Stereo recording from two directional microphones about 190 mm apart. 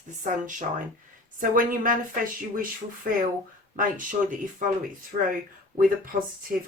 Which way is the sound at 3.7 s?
45° right (ahead or behind).